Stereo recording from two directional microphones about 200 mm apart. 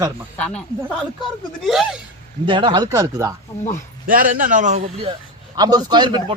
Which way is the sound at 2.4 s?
25° right (ahead or behind).